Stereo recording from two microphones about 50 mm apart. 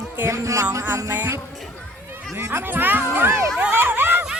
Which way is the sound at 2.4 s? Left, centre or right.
Right.